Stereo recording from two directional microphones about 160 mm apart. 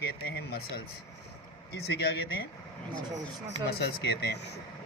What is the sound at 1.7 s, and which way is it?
Speech, 90° left.